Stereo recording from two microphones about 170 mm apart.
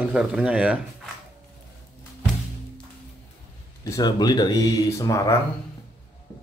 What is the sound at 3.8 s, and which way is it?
Speech, 20° left (ahead or behind).